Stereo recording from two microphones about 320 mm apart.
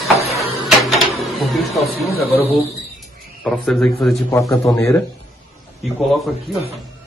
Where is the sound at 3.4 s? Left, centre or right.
Centre.